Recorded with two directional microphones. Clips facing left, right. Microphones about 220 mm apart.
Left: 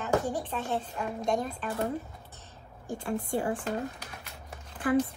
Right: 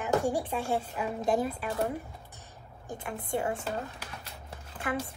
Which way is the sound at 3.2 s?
25° right (ahead or behind).